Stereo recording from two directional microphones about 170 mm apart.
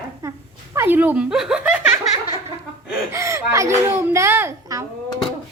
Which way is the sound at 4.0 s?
15° right (ahead or behind).